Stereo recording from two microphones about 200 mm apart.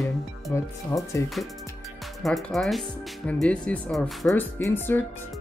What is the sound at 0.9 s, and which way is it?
Speech, 15° left (ahead or behind).